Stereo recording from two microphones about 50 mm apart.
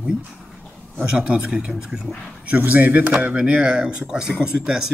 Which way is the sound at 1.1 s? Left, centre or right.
Centre.